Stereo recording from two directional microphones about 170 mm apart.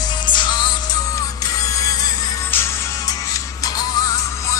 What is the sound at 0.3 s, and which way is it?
Music, 25° left (ahead or behind).